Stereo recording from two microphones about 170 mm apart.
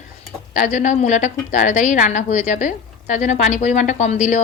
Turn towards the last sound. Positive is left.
turn(degrees=45)  # may be behind; listen again after turning